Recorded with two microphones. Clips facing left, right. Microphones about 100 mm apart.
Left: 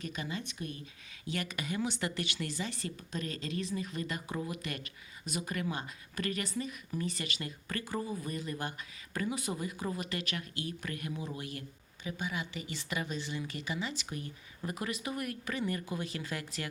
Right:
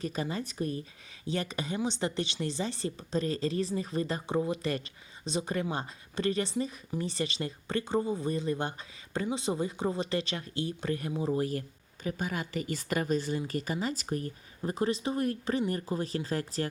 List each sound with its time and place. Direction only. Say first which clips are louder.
0.0 s speech: right 6 dB; 35° right (ahead or behind)